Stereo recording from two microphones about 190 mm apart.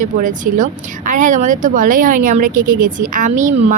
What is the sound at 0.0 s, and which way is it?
Speech, 45° right (ahead or behind).